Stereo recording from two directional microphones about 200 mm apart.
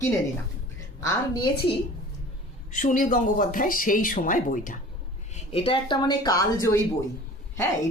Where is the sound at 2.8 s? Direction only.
40° left (ahead or behind).